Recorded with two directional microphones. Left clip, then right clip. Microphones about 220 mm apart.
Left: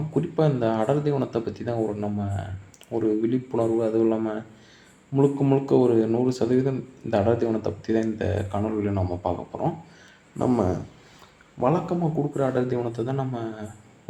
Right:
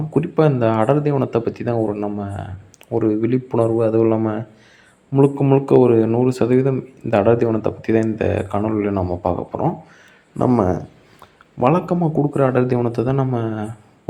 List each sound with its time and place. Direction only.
0.1 s a man's voice: 30° right (ahead or behind)